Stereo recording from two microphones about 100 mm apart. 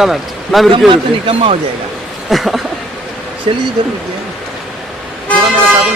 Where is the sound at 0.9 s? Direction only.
65° right (ahead or behind).